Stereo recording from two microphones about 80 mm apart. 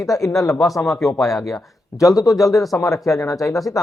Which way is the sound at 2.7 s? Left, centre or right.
Left.